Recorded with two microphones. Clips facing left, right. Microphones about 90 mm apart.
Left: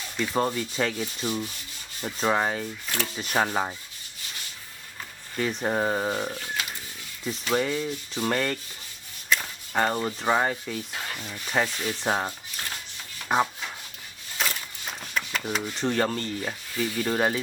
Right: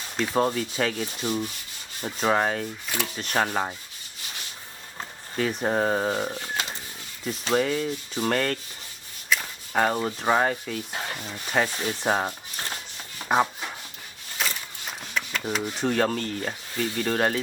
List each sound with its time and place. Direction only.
0.3 s speech: centre (ahead or behind)
2.3 s speech: centre (ahead or behind)
5.4 s speech: 5° right (ahead or behind)
6.5 s a sound: 30° right (ahead or behind)
7.5 s speech: centre (ahead or behind)
11.2 s speech: 20° right (ahead or behind)
11.4 s speech: 5° right (ahead or behind)
12.6 s a sound: 25° right (ahead or behind)
13.2 s chopping: 10° right (ahead or behind)
14.3 s a sound: centre (ahead or behind)
15.4 s speech: 10° right (ahead or behind)